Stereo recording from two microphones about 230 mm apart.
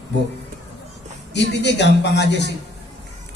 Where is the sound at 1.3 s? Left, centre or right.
Left.